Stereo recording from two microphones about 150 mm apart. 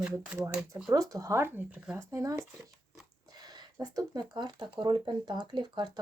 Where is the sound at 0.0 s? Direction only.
10° right (ahead or behind).